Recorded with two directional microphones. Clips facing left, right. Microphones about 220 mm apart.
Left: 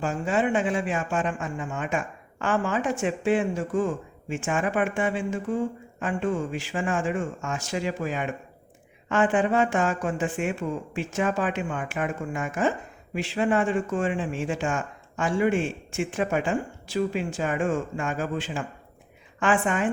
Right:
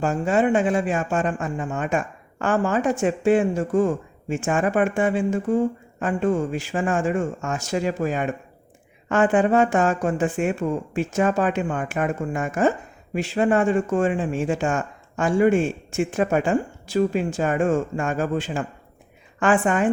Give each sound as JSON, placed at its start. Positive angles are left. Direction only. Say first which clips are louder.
{"t": 0.0, "sound": "speech", "louder": "right 5 dB", "side_deg": -45}